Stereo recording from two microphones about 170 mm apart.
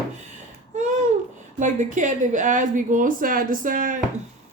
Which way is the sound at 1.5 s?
45° right (ahead or behind).